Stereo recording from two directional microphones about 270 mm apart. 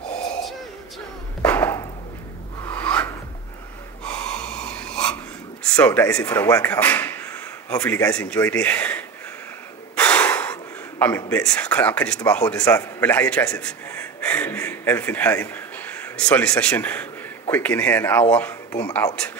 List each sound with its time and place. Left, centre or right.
1.4 s chop: centre
2.6 s a sound: centre
4.0 s snort: centre
5.8 s speech: centre